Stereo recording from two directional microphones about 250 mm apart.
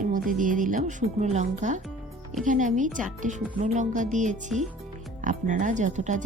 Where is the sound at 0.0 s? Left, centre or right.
Right.